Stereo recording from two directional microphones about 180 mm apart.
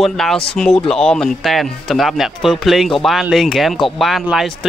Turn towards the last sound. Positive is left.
turn(degrees=0)  # may be behind; listen again after turning